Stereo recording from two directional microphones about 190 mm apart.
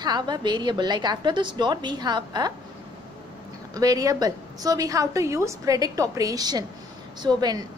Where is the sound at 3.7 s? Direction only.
20° right (ahead or behind).